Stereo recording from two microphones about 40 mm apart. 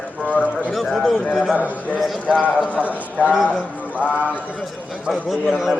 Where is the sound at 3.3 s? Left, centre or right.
Centre.